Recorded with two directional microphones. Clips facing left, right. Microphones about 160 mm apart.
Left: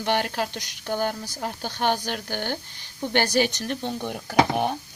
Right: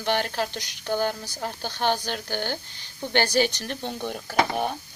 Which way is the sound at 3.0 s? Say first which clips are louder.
Even; 10° left (ahead or behind).